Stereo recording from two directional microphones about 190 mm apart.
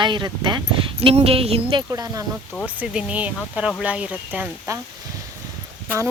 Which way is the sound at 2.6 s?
5° right (ahead or behind).